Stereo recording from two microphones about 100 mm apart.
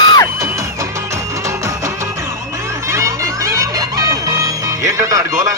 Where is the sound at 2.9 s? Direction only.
30° right (ahead or behind).